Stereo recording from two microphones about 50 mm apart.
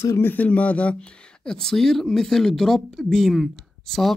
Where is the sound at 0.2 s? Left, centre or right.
Left.